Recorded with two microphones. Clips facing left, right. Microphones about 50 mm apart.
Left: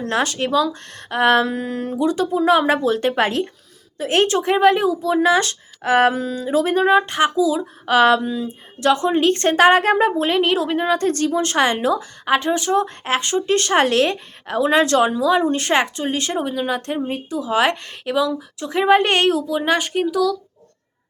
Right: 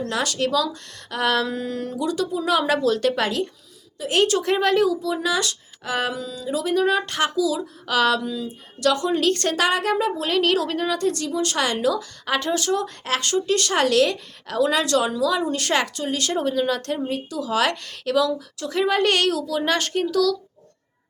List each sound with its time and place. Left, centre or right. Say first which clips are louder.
0.1 s speech: left 5 dB; left
10.9 s a woman's voice: left 5 dB; left
16.3 s speech: even; centre